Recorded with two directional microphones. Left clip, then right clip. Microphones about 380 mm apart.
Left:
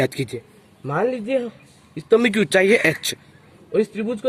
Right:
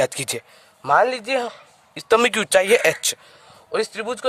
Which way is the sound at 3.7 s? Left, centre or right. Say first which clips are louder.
Left 2 dB; right.